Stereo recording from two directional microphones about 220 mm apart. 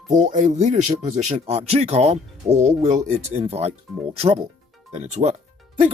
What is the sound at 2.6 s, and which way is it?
Music, 30° right (ahead or behind).